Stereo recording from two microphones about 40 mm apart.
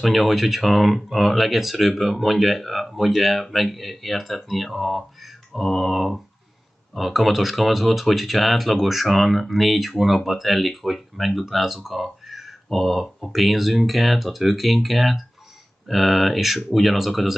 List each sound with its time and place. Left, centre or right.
0.0 s speech: centre